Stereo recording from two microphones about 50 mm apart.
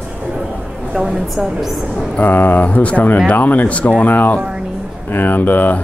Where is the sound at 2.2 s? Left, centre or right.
Left.